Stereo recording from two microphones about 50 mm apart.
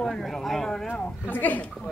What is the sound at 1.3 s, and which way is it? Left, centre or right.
Speech, left.